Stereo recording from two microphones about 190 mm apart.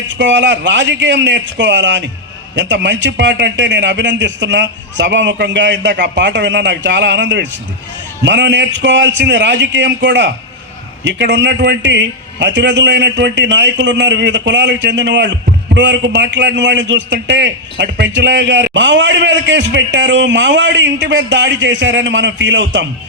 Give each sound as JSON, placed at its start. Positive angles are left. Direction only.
{"t": 0.1, "sound": "a man's voice", "side_deg": -70}